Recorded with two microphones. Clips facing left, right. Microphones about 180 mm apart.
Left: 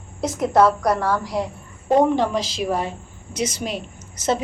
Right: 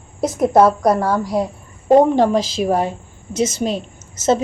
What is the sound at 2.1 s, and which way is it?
Speech, 45° right (ahead or behind).